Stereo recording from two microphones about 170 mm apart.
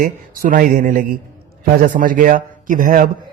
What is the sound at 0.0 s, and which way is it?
Speech, 55° right (ahead or behind).